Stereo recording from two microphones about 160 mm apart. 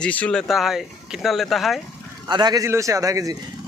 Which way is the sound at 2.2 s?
25° right (ahead or behind).